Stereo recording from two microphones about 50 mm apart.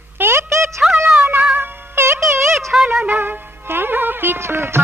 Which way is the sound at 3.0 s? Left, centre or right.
Right.